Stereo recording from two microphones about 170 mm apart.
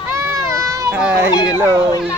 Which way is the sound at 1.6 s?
15° right (ahead or behind).